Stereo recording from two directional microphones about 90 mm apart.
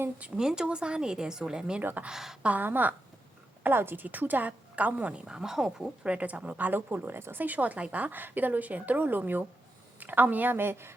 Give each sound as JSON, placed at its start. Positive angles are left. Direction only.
{"t": 0.2, "sound": "a woman's voice", "side_deg": -10}
{"t": 1.8, "sound": "speech", "side_deg": -20}
{"t": 2.0, "sound": "speech", "side_deg": -5}
{"t": 2.5, "sound": "a woman's voice", "side_deg": -20}